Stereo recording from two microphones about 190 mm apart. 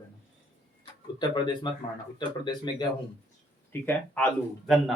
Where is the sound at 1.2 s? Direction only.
25° left (ahead or behind).